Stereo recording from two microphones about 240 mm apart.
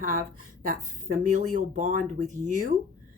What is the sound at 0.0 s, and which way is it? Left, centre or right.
A woman's voice, right.